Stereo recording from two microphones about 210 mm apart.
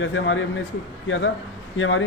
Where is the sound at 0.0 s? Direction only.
65° left (ahead or behind).